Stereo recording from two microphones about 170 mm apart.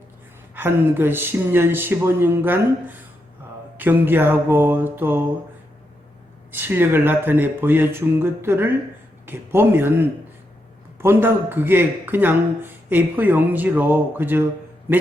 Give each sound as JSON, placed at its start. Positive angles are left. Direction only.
{"t": 0.5, "sound": "speech", "side_deg": -10}
{"t": 6.5, "sound": "speech", "side_deg": -10}